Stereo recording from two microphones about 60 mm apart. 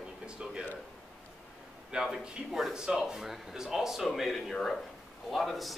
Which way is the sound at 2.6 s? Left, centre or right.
Centre.